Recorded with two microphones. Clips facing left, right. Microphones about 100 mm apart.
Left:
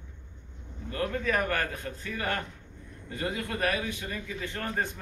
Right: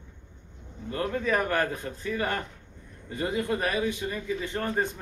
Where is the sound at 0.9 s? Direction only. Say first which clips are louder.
Right 2 dB; 25° right (ahead or behind).